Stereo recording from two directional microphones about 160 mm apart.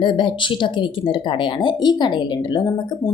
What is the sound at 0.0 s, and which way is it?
A woman's voice, 30° left (ahead or behind).